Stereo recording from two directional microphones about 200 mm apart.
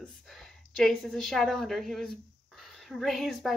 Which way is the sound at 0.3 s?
Centre (ahead or behind).